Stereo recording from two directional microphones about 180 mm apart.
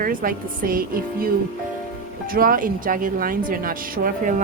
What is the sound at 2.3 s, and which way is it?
A woman's voice, 50° right (ahead or behind).